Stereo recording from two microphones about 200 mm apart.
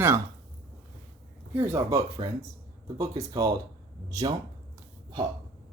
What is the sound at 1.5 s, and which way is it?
Speech, 15° right (ahead or behind).